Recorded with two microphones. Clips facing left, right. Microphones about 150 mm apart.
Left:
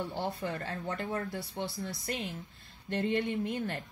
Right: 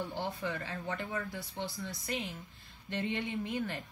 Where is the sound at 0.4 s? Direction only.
50° left (ahead or behind).